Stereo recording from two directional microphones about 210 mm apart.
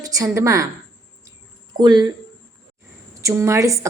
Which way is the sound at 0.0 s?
15° right (ahead or behind).